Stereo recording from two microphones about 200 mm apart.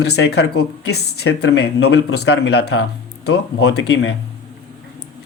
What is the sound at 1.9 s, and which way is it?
Speech, 90° left.